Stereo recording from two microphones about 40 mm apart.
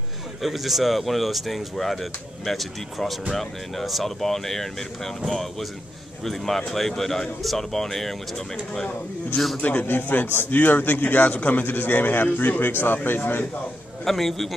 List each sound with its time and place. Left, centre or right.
0.4 s speech: centre
9.6 s a man's voice: left
9.8 s a man's voice: left
14.0 s speech: centre